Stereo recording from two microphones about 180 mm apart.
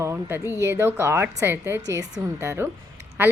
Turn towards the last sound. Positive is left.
turn(degrees=-10)  # may be behind; listen again after turning